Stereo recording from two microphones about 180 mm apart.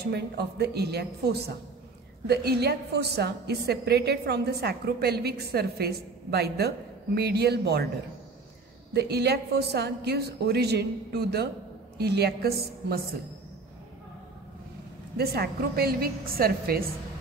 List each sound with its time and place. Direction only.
0.0 s a woman's voice: 65° right (ahead or behind)
8.9 s a woman's voice: 65° right (ahead or behind)
15.1 s a woman's voice: 60° right (ahead or behind)